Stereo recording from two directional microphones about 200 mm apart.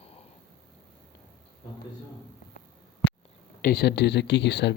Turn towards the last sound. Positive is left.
turn(degrees=60)  # may be behind; listen again after turning